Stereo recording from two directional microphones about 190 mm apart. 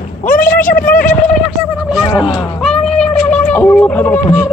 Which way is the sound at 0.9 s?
45° left (ahead or behind).